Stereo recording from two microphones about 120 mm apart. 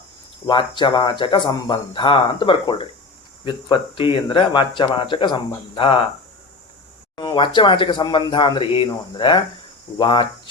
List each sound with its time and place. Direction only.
0.4 s speech: 30° left (ahead or behind)
0.8 s speech: 40° left (ahead or behind)
7.2 s speech: 40° left (ahead or behind)